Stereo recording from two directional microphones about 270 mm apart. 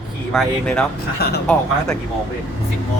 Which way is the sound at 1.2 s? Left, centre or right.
Left.